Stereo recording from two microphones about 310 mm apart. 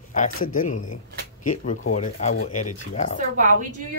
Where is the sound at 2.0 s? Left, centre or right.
Left.